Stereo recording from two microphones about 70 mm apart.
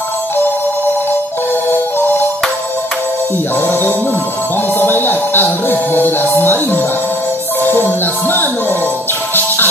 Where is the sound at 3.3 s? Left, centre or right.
Left.